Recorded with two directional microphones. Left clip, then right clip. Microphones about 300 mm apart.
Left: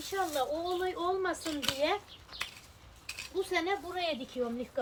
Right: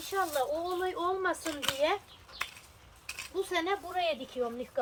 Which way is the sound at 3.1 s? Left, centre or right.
Centre.